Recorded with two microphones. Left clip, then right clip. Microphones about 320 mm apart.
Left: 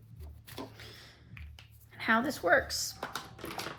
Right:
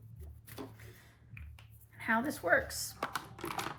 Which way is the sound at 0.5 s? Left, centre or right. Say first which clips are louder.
Left 4 dB; centre.